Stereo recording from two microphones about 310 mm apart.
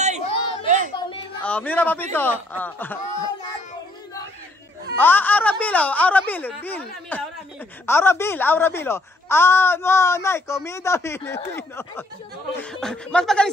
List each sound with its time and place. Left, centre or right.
0.3 s a sound: centre
1.4 s a man's voice: centre
4.9 s speech: centre